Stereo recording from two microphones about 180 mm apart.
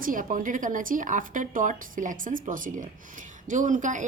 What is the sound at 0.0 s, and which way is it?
A woman's voice, 50° right (ahead or behind).